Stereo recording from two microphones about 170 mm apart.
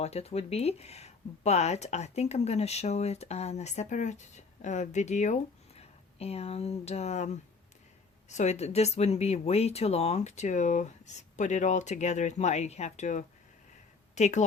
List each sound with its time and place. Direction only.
0.0 s a woman's voice: 40° left (ahead or behind)